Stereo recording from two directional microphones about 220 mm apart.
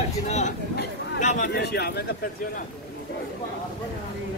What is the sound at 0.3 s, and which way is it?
Speech, 30° left (ahead or behind).